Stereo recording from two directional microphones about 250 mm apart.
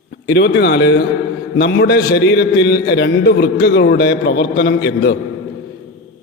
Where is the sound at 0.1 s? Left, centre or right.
Left.